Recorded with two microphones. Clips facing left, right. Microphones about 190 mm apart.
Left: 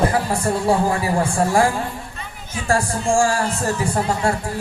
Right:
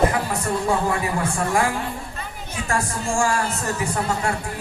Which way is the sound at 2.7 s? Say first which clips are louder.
Left 6 dB; 30° left (ahead or behind).